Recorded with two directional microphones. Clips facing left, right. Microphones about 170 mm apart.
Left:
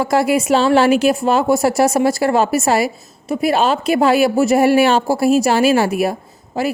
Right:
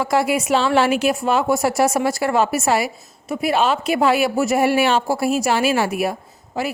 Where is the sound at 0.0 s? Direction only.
40° left (ahead or behind).